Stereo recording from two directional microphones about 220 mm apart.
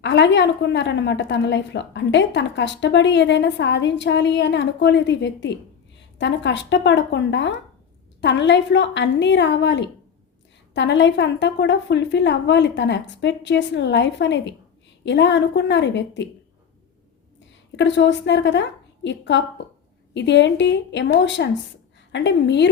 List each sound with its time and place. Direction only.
0.0 s a woman's voice: 55° left (ahead or behind)
17.7 s a woman's voice: 55° left (ahead or behind)